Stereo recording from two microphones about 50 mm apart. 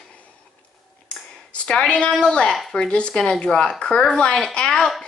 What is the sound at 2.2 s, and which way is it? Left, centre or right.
Speech, centre.